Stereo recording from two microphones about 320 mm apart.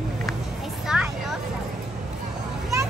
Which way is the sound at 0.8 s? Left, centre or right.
Centre.